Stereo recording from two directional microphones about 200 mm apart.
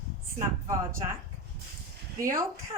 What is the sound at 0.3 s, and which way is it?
Speech, 15° right (ahead or behind).